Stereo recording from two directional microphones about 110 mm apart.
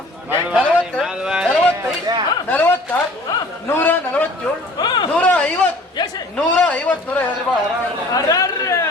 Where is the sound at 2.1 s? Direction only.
40° right (ahead or behind).